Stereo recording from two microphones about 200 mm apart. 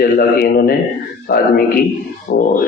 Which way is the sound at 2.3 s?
50° left (ahead or behind).